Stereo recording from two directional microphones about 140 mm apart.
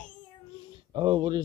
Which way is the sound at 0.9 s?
30° right (ahead or behind).